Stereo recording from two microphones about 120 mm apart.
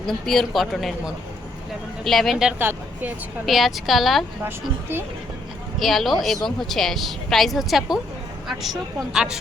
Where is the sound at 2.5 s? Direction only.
15° right (ahead or behind).